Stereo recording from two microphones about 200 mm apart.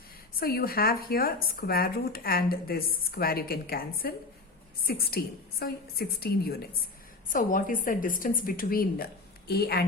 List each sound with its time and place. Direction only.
0.3 s speech: 50° left (ahead or behind)